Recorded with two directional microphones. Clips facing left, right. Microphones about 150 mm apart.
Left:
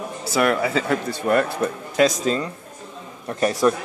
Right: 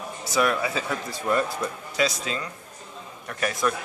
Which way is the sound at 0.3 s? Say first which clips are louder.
Left 4 dB; 65° left (ahead or behind).